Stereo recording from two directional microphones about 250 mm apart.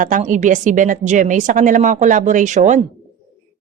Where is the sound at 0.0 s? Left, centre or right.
Right.